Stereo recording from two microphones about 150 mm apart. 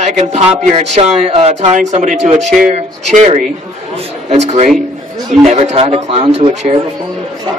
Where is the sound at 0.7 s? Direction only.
45° right (ahead or behind).